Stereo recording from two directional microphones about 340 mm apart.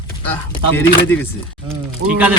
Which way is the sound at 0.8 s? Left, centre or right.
Centre.